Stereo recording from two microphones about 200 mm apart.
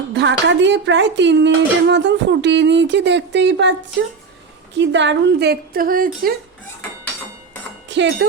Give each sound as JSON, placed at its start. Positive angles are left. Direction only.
{"t": 0.2, "sound": "a woman's voice", "side_deg": -65}
{"t": 7.9, "sound": "speech", "side_deg": -65}